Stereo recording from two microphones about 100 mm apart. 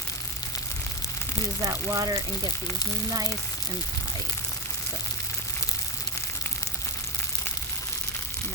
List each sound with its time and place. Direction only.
1.6 s speech: 35° right (ahead or behind)